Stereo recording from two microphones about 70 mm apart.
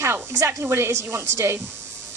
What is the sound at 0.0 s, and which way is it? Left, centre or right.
Speech, right.